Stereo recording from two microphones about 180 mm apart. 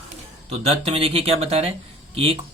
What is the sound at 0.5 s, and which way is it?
Speech, 35° right (ahead or behind).